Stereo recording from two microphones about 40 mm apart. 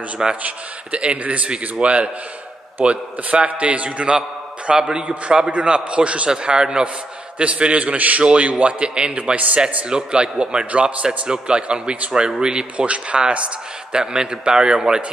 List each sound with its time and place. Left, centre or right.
0.2 s a man's voice: centre
0.9 s a man's voice: right
8.7 s a man's voice: right
9.8 s a man's voice: right
12.7 s a man's voice: right